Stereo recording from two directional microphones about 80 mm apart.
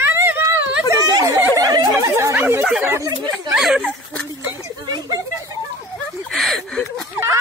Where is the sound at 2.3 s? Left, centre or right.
Right.